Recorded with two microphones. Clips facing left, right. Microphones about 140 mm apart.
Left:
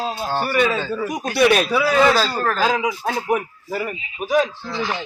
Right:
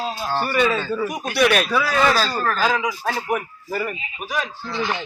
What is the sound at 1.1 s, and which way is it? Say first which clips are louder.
Speech: left 4 dB; 25° left (ahead or behind).